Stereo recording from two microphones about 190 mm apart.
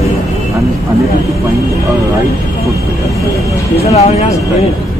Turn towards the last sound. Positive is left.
turn(degrees=35)  # may be behind; listen again after turning